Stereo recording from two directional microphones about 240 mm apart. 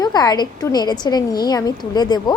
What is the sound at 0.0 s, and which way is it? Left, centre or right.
A woman's voice, centre.